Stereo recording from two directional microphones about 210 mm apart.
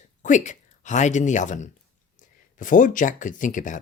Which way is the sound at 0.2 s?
35° left (ahead or behind).